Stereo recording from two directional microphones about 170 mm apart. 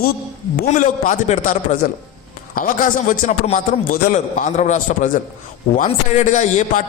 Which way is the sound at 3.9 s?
55° left (ahead or behind).